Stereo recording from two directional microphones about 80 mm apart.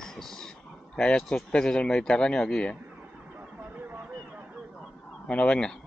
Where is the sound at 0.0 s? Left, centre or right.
Centre.